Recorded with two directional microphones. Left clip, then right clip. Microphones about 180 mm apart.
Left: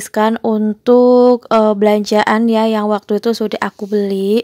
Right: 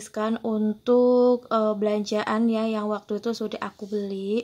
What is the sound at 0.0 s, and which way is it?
Speech, 45° left (ahead or behind).